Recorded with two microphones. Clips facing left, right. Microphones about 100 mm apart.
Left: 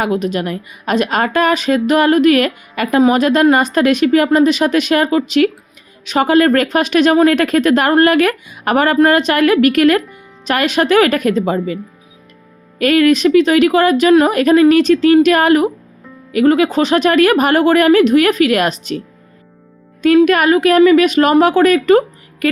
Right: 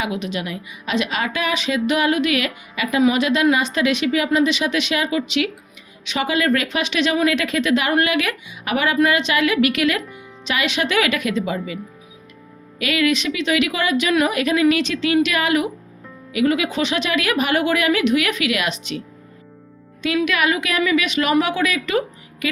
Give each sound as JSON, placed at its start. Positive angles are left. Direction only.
{"t": 0.0, "sound": "a woman's voice", "side_deg": 45}
{"t": 12.8, "sound": "a woman's voice", "side_deg": 45}